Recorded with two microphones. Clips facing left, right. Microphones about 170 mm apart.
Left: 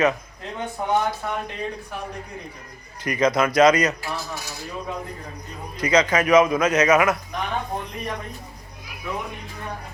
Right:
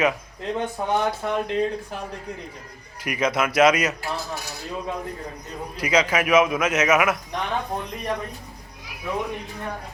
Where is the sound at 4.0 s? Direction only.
55° right (ahead or behind).